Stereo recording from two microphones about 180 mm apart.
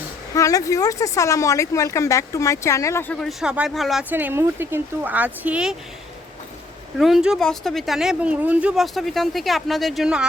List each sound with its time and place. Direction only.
0.3 s speech: 20° left (ahead or behind); by 4.0 s centre (ahead or behind)
4.1 s speech: 10° right (ahead or behind)
7.0 s speech: 5° right (ahead or behind)